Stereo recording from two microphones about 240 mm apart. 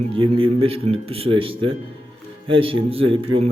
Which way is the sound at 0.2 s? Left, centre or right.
Right.